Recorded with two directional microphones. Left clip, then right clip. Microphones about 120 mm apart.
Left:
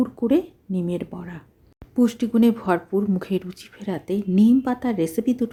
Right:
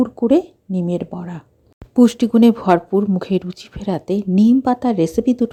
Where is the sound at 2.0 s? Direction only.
45° right (ahead or behind).